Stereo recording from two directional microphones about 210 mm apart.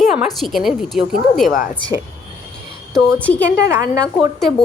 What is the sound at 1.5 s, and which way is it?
Speech, 40° left (ahead or behind).